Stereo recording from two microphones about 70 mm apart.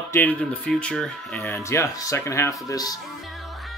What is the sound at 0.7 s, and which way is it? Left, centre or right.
Speech, centre.